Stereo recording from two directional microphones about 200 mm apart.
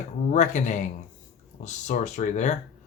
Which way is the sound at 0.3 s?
35° left (ahead or behind).